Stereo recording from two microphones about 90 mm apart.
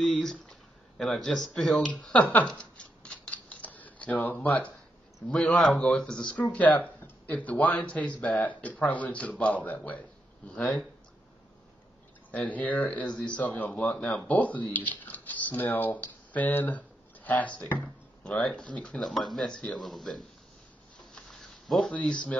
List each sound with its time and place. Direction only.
0.0 s a sound: 5° left (ahead or behind)
1.9 s speech: 15° left (ahead or behind)
2.4 s scissors: 10° left (ahead or behind)
5.3 s a man's voice: 10° left (ahead or behind)
10.5 s speech: 5° left (ahead or behind)
12.3 s speech: 15° left (ahead or behind)
21.0 s a sound: 5° left (ahead or behind)